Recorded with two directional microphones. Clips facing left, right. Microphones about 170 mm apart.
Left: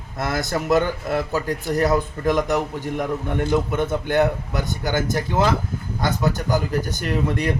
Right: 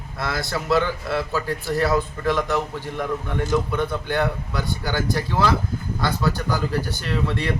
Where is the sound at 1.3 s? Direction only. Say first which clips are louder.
Left 2 dB; 20° left (ahead or behind).